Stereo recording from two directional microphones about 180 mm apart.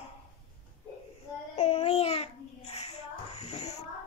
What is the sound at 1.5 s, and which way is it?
Babbling, 35° left (ahead or behind).